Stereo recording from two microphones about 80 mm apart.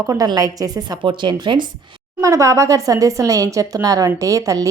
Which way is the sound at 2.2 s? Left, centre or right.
Right.